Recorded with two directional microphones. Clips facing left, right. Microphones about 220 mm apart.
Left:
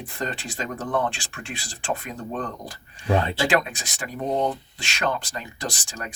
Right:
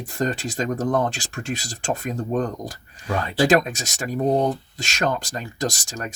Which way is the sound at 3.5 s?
40° right (ahead or behind).